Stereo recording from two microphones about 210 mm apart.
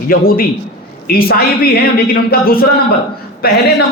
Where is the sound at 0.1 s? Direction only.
45° left (ahead or behind).